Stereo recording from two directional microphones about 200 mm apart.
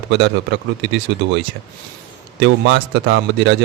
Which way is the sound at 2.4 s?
60° right (ahead or behind).